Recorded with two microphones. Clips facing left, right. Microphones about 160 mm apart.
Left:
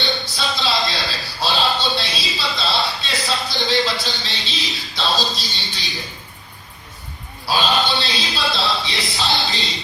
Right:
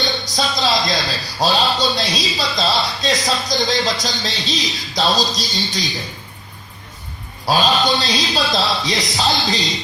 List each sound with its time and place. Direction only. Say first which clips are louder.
0.3 s a man's voice: right 5 dB; 40° right (ahead or behind)
7.4 s a man's voice: right 3 dB; 40° right (ahead or behind)